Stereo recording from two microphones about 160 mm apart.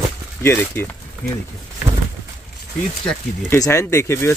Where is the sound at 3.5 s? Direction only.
15° left (ahead or behind).